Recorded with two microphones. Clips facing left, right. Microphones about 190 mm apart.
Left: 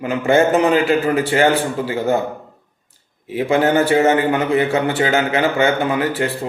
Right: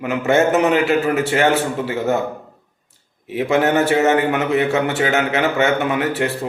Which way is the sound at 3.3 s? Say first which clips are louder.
Left 1 dB; 30° left (ahead or behind).